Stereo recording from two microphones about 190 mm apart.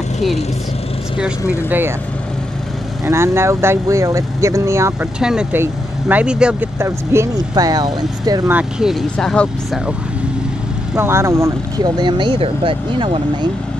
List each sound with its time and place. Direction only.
1.7 s speech: 10° right (ahead or behind)
3.1 s speech: 15° right (ahead or behind)
5.2 s speech: 5° right (ahead or behind); by 8.5 s 20° right (ahead or behind)
8.5 s speech: 5° right (ahead or behind)
11.0 s speech: 15° right (ahead or behind)